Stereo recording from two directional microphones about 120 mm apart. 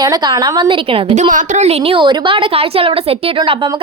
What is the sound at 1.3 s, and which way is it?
A woman's voice, 80° right.